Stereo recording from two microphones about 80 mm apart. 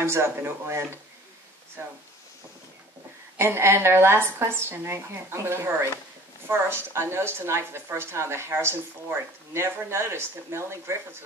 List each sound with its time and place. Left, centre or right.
0.0 s a woman's voice: right
3.3 s a woman's voice: right